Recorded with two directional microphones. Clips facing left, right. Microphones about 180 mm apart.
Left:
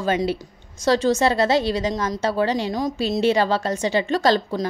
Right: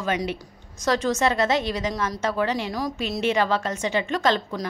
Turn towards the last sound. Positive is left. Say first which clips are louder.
# left 4 dB
turn(degrees=35)  # may be behind; listen again after turning